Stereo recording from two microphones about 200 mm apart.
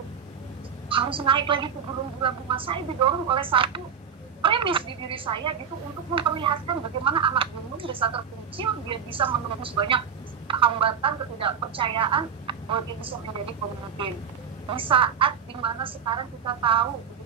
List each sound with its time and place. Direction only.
0.8 s a woman's voice: 25° right (ahead or behind)
14.7 s speech: 25° right (ahead or behind)